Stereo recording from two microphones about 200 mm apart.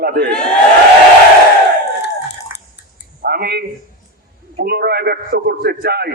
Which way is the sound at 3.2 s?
50° right (ahead or behind).